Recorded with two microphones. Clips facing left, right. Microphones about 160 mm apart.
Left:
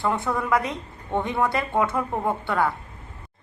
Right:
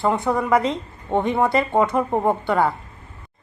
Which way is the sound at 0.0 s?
20° right (ahead or behind).